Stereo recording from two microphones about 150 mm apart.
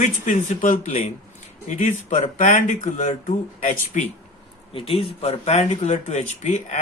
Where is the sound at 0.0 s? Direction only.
55° left (ahead or behind).